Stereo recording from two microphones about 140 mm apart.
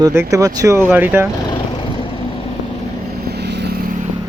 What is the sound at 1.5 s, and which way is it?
Vehicle, 35° left (ahead or behind).